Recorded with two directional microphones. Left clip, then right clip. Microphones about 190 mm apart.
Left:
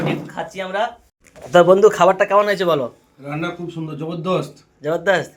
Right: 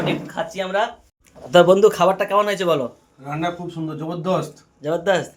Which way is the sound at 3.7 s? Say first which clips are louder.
Even; 25° right (ahead or behind).